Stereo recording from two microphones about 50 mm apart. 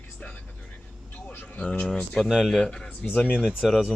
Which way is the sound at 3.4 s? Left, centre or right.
Centre.